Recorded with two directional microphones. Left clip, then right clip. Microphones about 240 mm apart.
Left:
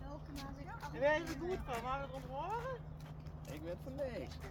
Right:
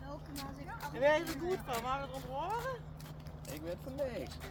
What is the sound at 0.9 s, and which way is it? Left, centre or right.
Speech, right.